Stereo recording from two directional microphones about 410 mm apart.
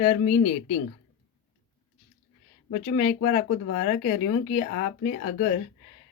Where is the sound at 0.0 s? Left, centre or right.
Centre.